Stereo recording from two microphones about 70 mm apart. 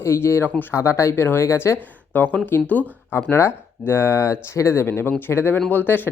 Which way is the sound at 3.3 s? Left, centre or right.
Left.